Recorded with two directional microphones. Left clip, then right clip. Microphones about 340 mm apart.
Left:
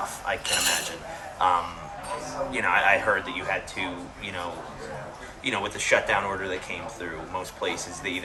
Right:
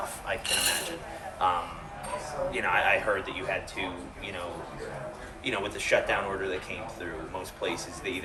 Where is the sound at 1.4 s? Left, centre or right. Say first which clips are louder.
Left 4 dB; left.